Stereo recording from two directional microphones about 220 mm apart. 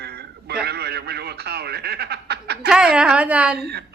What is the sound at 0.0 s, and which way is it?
Radio, 45° right (ahead or behind).